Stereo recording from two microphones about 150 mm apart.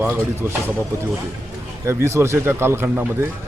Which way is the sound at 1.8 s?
20° right (ahead or behind).